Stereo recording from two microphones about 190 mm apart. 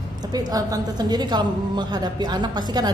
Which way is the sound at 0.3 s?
20° right (ahead or behind).